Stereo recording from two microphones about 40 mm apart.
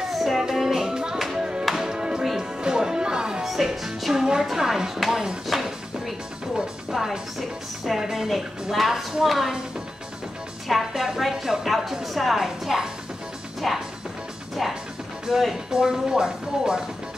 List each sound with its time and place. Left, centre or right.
0.1 s music: centre
3.4 s speech: centre
5.5 s music: centre
6.5 s a woman's voice: centre
10.7 s a woman's voice: centre